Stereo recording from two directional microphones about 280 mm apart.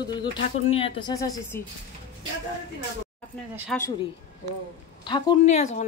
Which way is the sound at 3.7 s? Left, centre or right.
Centre.